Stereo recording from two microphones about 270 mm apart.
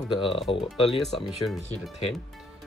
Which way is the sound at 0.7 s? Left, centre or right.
Centre.